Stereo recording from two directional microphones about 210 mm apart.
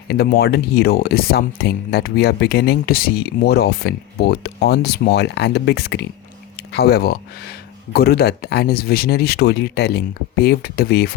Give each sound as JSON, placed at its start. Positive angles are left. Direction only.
{"t": 0.1, "sound": "speech", "side_deg": 50}